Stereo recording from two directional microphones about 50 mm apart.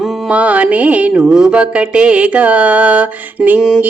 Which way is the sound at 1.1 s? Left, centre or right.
Centre.